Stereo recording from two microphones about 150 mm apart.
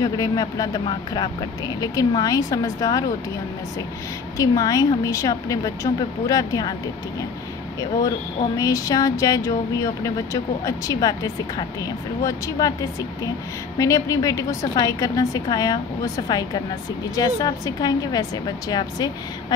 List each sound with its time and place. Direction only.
0.0 s speech: 25° left (ahead or behind)
4.4 s speech: 25° left (ahead or behind)
8.5 s speech: 25° left (ahead or behind)
13.7 s speech: 20° left (ahead or behind)